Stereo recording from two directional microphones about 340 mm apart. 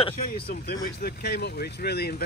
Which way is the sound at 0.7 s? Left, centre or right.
Left.